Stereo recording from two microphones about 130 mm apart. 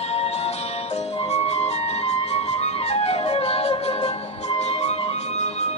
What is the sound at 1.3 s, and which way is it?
Music, 55° left (ahead or behind).